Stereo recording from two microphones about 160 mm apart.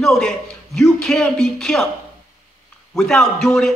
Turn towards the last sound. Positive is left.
turn(degrees=5)  # may be behind; listen again after turning